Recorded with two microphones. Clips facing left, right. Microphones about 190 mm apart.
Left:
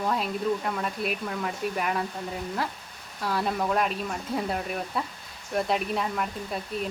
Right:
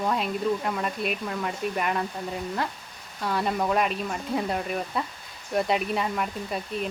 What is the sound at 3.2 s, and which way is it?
Speech, centre (ahead or behind).